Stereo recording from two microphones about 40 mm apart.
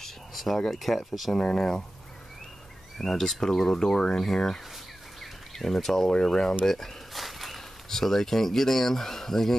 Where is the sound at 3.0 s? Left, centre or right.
Centre.